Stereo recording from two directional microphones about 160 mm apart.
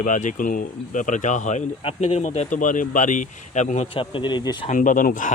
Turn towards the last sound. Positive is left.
turn(degrees=55)  # may be behind; listen again after turning